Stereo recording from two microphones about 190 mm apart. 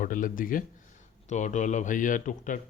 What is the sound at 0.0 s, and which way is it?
Speech, 45° left (ahead or behind).